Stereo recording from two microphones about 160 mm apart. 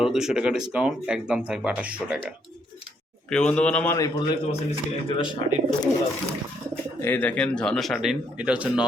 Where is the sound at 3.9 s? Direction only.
20° left (ahead or behind).